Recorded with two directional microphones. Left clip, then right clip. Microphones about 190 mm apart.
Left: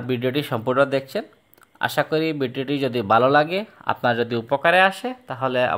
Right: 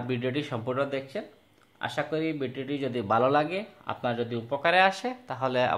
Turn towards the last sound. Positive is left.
turn(degrees=20)  # may be behind; listen again after turning